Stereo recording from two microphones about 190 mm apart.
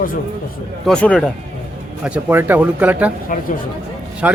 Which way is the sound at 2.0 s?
10° right (ahead or behind).